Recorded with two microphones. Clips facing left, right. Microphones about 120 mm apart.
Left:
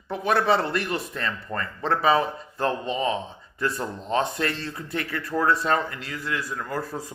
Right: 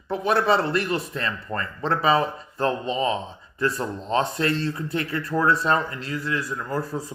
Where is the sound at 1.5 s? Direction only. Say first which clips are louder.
Right 2 dB; 15° right (ahead or behind).